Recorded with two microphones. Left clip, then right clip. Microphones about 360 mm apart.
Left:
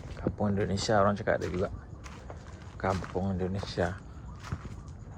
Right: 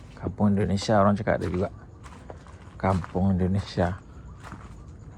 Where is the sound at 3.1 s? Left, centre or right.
Right.